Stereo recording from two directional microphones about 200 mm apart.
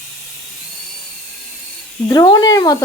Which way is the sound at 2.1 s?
20° left (ahead or behind).